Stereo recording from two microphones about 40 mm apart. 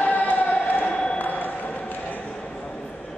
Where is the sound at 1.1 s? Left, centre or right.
Left.